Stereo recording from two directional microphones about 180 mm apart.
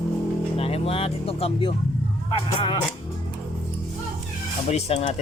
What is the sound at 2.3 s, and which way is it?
Speech, 25° left (ahead or behind).